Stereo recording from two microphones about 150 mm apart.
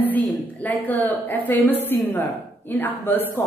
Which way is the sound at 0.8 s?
15° left (ahead or behind).